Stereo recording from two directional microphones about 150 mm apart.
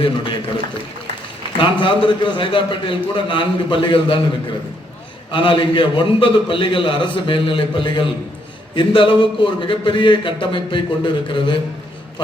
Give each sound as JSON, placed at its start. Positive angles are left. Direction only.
{"t": 1.5, "sound": "a man's voice", "side_deg": 35}
{"t": 5.3, "sound": "a man's voice", "side_deg": 35}